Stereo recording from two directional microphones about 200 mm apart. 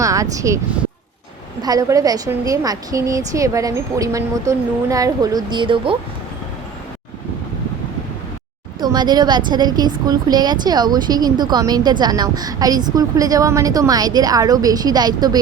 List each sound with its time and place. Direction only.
0.0 s a woman's voice: 15° right (ahead or behind)
8.8 s a woman's voice: 20° right (ahead or behind)